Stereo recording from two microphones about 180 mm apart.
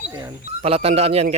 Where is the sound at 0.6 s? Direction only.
35° right (ahead or behind).